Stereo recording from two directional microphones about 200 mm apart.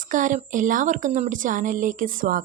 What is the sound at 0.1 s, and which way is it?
Speech, 40° right (ahead or behind).